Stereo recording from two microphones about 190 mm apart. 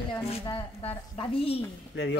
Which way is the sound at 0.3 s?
30° left (ahead or behind).